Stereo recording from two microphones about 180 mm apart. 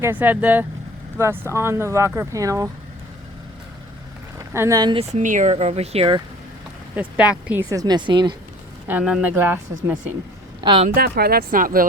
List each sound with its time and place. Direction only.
0.0 s speech: 10° right (ahead or behind)
4.4 s speech: 15° right (ahead or behind)
5.1 s speech: 45° right (ahead or behind)
6.9 s speech: 10° right (ahead or behind)
7.7 s a woman's voice: 20° right (ahead or behind)
8.9 s speech: 5° right (ahead or behind)
10.6 s speech: 25° right (ahead or behind)
10.8 s speech: 60° right (ahead or behind)